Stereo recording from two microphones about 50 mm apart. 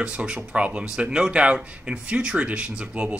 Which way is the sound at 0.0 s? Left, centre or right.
Right.